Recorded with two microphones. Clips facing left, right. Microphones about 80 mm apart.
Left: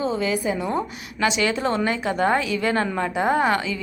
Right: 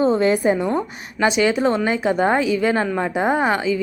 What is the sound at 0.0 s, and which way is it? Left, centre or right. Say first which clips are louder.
Speech: right 7 dB; right.